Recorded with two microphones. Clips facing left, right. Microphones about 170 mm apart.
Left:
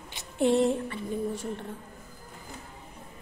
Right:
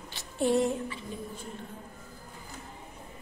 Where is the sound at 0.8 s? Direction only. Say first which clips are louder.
Left 7 dB; 75° left (ahead or behind).